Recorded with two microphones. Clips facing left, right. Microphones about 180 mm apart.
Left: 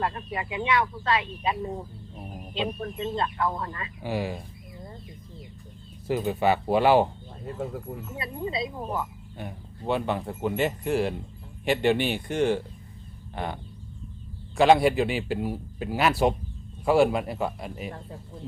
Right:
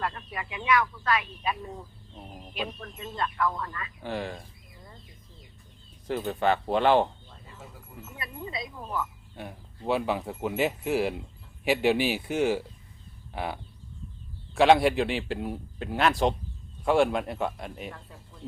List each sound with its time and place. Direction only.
0.0 s speech: 25° left (ahead or behind)
2.1 s chicken: 10° left (ahead or behind)
2.8 s speech: 25° left (ahead or behind)
4.0 s speech: 10° left (ahead or behind)
6.1 s speech: 10° left (ahead or behind)
7.4 s speech: 60° left (ahead or behind)
8.1 s speech: 25° left (ahead or behind)
9.4 s speech: centre (ahead or behind)